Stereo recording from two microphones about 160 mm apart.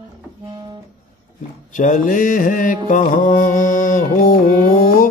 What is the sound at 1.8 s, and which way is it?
Mantra, 55° left (ahead or behind).